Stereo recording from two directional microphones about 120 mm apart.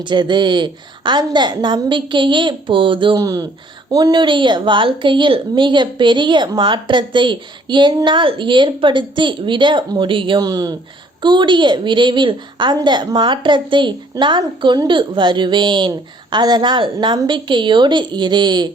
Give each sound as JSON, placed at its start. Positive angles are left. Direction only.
{"t": 0.0, "sound": "a woman's voice", "side_deg": -40}
{"t": 3.2, "sound": "a woman's voice", "side_deg": -30}
{"t": 10.4, "sound": "a woman's voice", "side_deg": -35}